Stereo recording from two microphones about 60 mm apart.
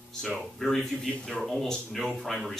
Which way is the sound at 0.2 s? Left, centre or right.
Centre.